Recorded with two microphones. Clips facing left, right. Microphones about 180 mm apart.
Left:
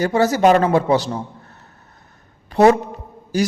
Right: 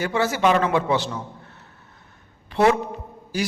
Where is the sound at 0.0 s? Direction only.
40° left (ahead or behind).